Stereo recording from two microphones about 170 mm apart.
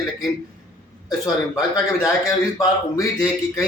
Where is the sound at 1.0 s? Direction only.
20° left (ahead or behind).